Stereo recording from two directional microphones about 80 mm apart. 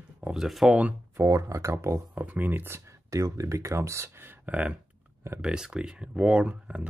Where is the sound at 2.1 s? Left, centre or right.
Right.